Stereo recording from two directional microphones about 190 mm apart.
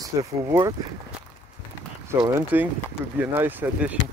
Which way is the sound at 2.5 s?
10° right (ahead or behind).